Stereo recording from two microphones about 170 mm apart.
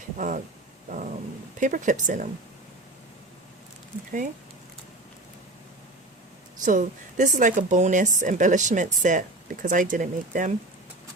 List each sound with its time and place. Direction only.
0.2 s a woman's voice: 50° right (ahead or behind)
1.5 s a woman's voice: 50° right (ahead or behind)
6.7 s a woman's voice: 50° right (ahead or behind)